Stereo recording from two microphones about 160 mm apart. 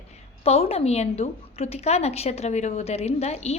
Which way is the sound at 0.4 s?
40° left (ahead or behind).